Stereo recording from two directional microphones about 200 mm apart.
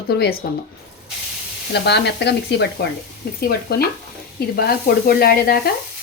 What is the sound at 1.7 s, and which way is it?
Speech, 55° left (ahead or behind).